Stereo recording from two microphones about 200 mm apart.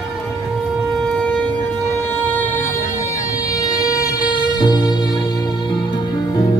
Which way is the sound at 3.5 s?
15° left (ahead or behind).